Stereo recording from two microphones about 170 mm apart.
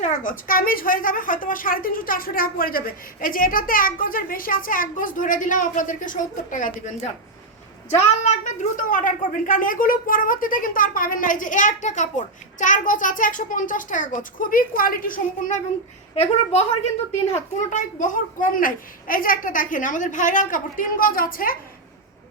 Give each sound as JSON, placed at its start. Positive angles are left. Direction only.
{"t": 0.0, "sound": "a woman's voice", "side_deg": 55}
{"t": 16.1, "sound": "a woman's voice", "side_deg": 40}